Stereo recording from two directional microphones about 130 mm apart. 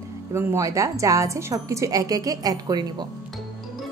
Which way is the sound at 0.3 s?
20° right (ahead or behind).